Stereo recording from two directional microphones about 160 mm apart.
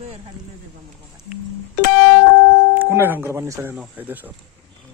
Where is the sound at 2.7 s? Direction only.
15° right (ahead or behind).